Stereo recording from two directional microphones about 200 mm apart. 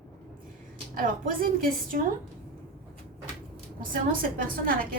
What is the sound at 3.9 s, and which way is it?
Speech, 45° right (ahead or behind).